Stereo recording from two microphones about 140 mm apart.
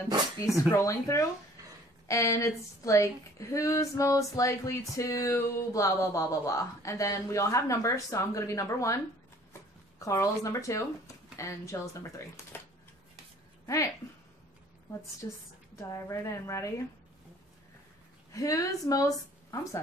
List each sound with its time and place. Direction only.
0.7 s a woman's voice: 20° left (ahead or behind)
12.5 s a sound: 15° left (ahead or behind)
15.2 s a woman's voice: 25° left (ahead or behind)
18.3 s a woman's voice: 25° left (ahead or behind)